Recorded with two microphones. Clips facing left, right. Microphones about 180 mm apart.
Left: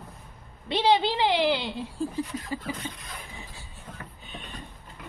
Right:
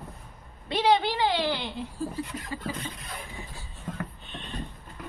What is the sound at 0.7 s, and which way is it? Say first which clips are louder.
Speech: left 1 dB; 30° left (ahead or behind).